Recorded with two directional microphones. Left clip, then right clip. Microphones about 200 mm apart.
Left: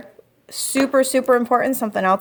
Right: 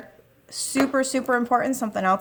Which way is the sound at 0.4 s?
30° left (ahead or behind).